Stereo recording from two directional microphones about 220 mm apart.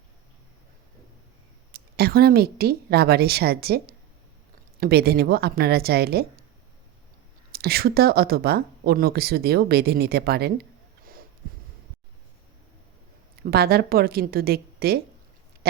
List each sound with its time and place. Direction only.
1.7 s speech: 45° right (ahead or behind)
7.5 s speech: 45° right (ahead or behind)
13.4 s speech: 45° right (ahead or behind)
15.6 s pig: 45° right (ahead or behind)